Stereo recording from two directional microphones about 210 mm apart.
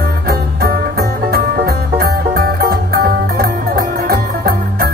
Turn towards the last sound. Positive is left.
turn(degrees=-45)  # may be behind; listen again after turning